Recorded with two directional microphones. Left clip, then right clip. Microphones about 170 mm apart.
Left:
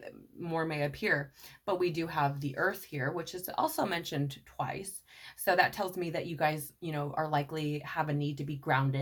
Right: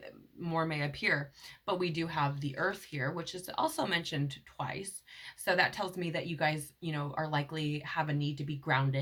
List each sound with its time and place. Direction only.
0.4 s speech: 35° left (ahead or behind)